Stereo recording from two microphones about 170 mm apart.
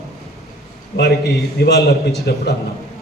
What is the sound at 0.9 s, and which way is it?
A man's voice, 70° left (ahead or behind).